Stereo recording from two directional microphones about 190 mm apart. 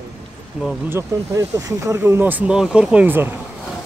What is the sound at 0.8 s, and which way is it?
Speech, 15° right (ahead or behind).